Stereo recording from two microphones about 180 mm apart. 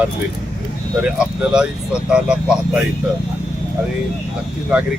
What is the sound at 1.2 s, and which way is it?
Speech, 5° right (ahead or behind).